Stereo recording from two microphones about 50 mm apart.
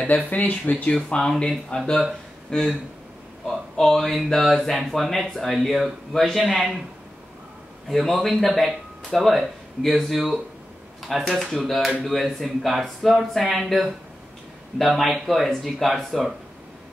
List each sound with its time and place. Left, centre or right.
0.3 s speech: left
0.9 s speech: centre
1.7 s speech: left
2.5 s speech: centre
7.9 s speech: centre